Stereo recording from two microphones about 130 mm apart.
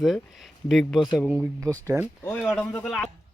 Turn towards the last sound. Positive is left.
turn(degrees=5)  # may be behind; listen again after turning